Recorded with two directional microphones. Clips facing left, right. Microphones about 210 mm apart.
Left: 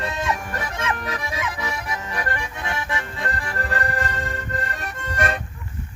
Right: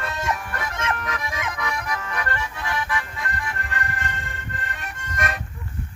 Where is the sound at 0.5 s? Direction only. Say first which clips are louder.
Left 1 dB; 35° left (ahead or behind).